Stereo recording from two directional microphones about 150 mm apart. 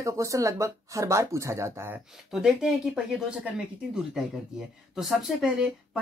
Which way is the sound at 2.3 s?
Centre (ahead or behind).